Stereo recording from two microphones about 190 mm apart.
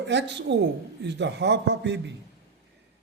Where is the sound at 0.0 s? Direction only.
65° right (ahead or behind).